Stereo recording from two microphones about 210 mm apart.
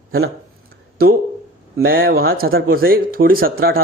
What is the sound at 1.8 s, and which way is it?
Speech, 45° right (ahead or behind).